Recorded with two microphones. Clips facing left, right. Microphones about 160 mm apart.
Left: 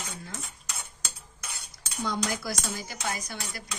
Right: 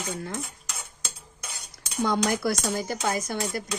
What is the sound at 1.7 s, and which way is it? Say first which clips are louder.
Cutlery: right 6 dB; 55° right (ahead or behind).